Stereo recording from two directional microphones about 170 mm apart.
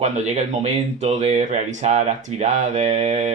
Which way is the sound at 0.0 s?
40° right (ahead or behind).